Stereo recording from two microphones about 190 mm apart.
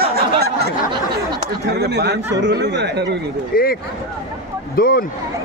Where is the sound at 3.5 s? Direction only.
50° left (ahead or behind).